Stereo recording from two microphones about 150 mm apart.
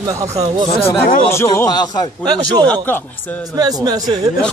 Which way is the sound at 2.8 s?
10° left (ahead or behind).